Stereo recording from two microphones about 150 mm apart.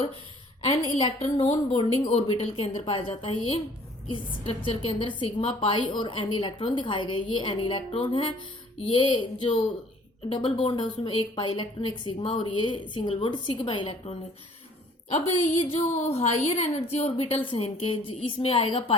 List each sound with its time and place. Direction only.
0.6 s a woman's voice: 40° left (ahead or behind)
16.0 s a woman's voice: 45° left (ahead or behind)